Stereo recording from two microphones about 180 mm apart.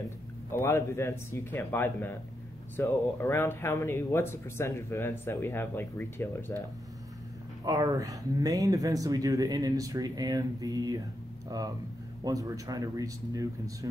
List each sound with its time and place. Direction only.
0.5 s speech: 15° left (ahead or behind)
7.6 s speech: 20° right (ahead or behind)